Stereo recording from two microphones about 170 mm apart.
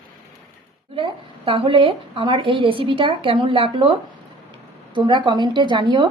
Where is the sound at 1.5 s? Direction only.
30° right (ahead or behind).